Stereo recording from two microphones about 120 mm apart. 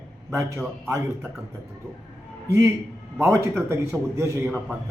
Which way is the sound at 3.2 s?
25° right (ahead or behind).